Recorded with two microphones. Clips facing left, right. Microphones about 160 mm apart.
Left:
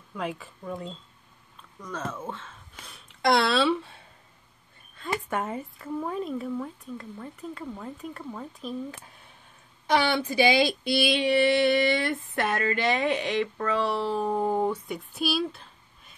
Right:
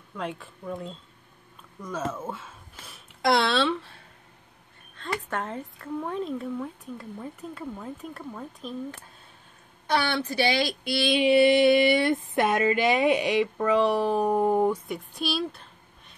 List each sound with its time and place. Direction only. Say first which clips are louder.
0.1 s speech: left 1 dB; centre (ahead or behind)
1.8 s a sound: right 3 dB; 10° right (ahead or behind)
2.8 s speech: even; centre (ahead or behind)
5.3 s a woman's voice: left 2 dB; 10° left (ahead or behind)
11.1 s a sound: right 6 dB; 15° right (ahead or behind)
14.9 s speech: left 1 dB; centre (ahead or behind)